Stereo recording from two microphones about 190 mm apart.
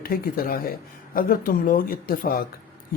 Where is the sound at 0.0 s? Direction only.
50° left (ahead or behind).